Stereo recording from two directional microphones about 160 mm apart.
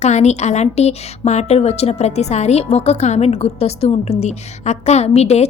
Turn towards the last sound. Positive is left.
turn(degrees=40)  # may be behind; listen again after turning